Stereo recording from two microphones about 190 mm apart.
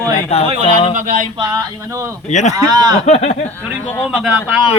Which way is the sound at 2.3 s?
35° left (ahead or behind).